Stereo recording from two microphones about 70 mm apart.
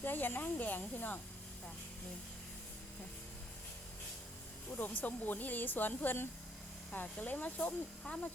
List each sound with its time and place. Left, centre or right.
0.0 s speech: left
4.8 s speech: left